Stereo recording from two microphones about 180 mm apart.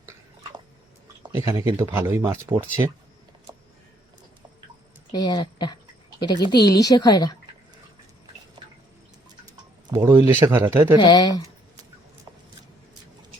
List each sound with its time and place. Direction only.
1.2 s a man's voice: 20° right (ahead or behind)
5.1 s a woman's voice: 25° left (ahead or behind)
9.8 s a man's voice: 20° right (ahead or behind)
11.0 s a woman's voice: 20° left (ahead or behind)